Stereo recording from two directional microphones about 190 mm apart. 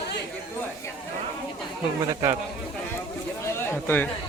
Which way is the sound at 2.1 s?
20° right (ahead or behind).